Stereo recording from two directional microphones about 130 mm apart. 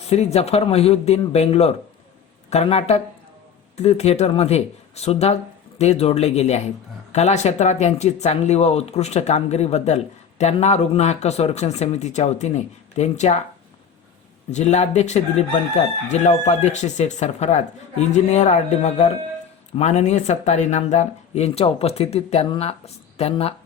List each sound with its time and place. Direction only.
0.1 s speech: 55° left (ahead or behind)
14.5 s speech: 60° left (ahead or behind)